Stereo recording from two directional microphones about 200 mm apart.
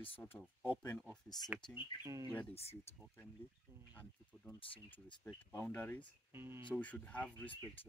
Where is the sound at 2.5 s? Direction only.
30° left (ahead or behind).